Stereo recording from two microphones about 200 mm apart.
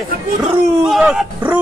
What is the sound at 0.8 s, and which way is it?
Speech, 5° right (ahead or behind).